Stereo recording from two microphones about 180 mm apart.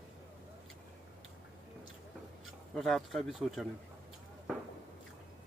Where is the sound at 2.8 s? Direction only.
Centre (ahead or behind).